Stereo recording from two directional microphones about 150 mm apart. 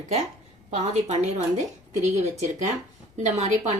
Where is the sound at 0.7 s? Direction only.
50° right (ahead or behind).